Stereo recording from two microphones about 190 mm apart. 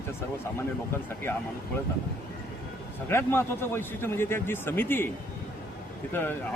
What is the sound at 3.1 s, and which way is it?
Speech, 10° left (ahead or behind).